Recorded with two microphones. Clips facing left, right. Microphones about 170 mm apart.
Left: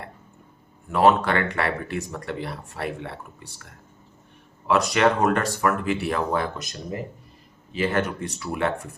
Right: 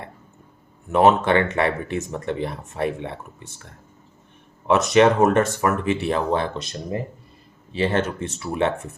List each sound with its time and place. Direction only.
0.9 s speech: 20° right (ahead or behind)
4.7 s speech: 20° right (ahead or behind)